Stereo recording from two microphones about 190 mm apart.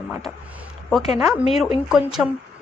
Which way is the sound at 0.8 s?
Centre (ahead or behind).